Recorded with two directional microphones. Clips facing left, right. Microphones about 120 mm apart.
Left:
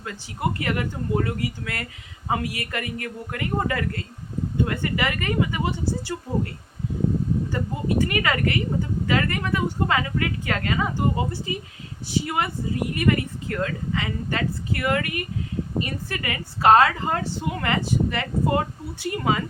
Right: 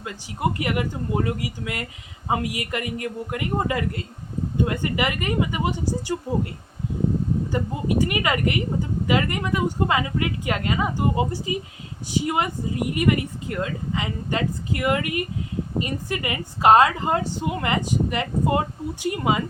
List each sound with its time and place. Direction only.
0.6 s speech: 15° right (ahead or behind)
7.5 s speech: 15° right (ahead or behind)